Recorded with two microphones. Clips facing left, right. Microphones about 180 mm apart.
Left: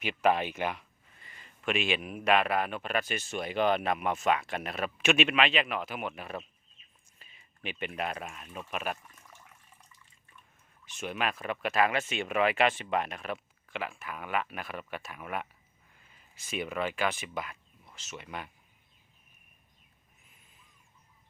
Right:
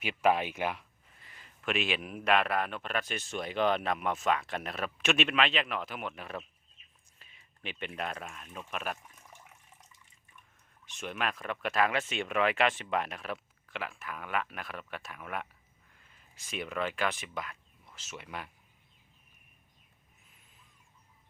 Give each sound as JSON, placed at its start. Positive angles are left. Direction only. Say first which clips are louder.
{"t": 0.0, "sound": "speech", "louder": "left 1 dB", "side_deg": -5}
{"t": 9.2, "sound": "water", "louder": "right 1 dB", "side_deg": -20}
{"t": 10.8, "sound": "speech", "louder": "left 2 dB", "side_deg": 5}